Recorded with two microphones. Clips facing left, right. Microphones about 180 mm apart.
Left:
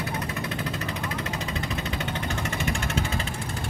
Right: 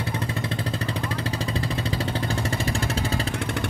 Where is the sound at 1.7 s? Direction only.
35° right (ahead or behind).